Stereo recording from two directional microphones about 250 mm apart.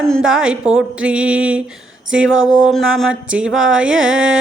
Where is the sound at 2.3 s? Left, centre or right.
Right.